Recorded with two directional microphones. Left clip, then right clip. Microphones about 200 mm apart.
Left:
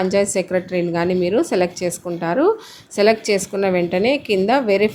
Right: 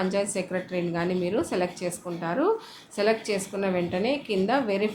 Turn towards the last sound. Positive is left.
turn(degrees=30)  # may be behind; listen again after turning